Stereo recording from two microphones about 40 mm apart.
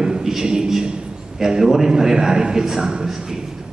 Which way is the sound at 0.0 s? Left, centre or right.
Centre.